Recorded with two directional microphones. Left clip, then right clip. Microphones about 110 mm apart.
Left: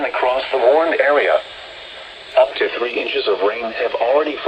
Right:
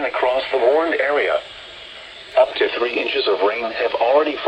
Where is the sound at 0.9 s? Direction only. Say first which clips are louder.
Left 4 dB; 80° left.